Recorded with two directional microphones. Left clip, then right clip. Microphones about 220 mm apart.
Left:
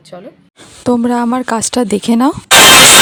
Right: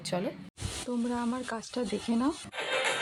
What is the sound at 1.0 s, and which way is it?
Speech, 50° left (ahead or behind).